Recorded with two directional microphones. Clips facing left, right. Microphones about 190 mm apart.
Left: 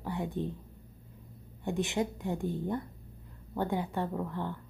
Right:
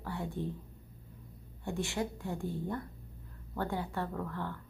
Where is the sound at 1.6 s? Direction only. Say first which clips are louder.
Left 4 dB; 20° left (ahead or behind).